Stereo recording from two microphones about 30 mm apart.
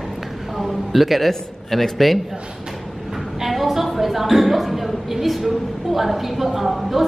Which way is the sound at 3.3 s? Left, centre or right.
Centre.